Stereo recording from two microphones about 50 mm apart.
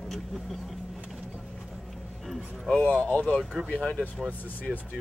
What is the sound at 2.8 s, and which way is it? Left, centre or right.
Speech, left.